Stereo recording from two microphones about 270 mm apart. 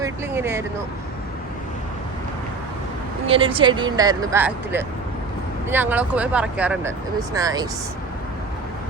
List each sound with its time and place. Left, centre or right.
0.0 s vehicle: centre
3.2 s speech: centre